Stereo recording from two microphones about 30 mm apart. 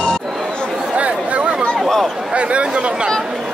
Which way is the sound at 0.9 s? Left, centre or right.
Right.